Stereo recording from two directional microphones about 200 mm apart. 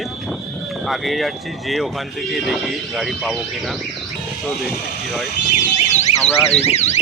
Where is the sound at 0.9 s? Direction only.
Centre (ahead or behind).